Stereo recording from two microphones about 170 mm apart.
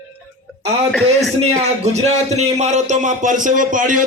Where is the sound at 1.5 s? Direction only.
40° right (ahead or behind).